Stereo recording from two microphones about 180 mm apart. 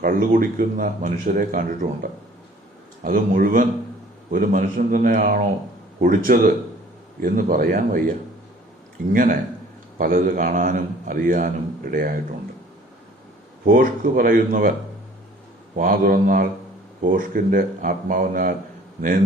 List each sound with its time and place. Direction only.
0.0 s a man's voice: 50° right (ahead or behind)
3.0 s a man's voice: 50° right (ahead or behind)
9.1 s a man's voice: 45° right (ahead or behind)
13.7 s a man's voice: 50° right (ahead or behind)
15.7 s a man's voice: 50° right (ahead or behind)